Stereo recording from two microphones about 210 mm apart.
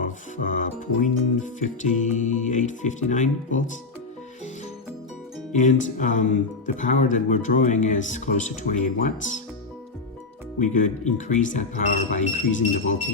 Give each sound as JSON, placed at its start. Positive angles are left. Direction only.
{"t": 0.0, "sound": "speech", "side_deg": 40}
{"t": 5.5, "sound": "speech", "side_deg": 35}
{"t": 10.6, "sound": "speech", "side_deg": 35}